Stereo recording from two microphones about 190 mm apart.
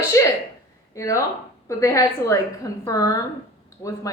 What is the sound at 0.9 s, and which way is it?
A woman's voice, 15° left (ahead or behind).